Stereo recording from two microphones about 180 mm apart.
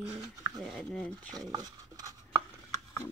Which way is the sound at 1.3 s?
20° right (ahead or behind).